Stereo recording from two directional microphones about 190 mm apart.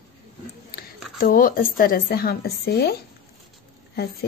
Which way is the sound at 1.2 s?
50° left (ahead or behind).